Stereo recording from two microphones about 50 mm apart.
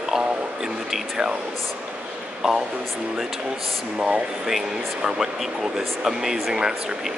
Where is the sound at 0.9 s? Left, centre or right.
Centre.